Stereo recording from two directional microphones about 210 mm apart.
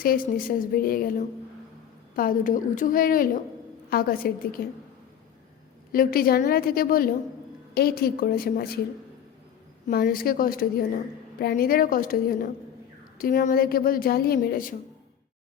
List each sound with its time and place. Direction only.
0.0 s a woman's voice: 45° left (ahead or behind)
2.1 s a woman's voice: 40° left (ahead or behind)
5.9 s a woman's voice: 45° left (ahead or behind)
9.8 s a woman's voice: 45° left (ahead or behind)